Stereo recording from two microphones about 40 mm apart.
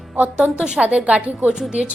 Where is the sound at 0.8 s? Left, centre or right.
Right.